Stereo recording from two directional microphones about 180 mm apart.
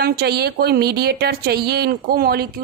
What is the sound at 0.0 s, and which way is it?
A woman's voice, 65° right (ahead or behind).